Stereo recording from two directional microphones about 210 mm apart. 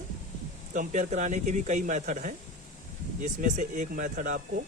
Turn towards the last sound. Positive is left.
turn(degrees=-40)  # may be behind; listen again after turning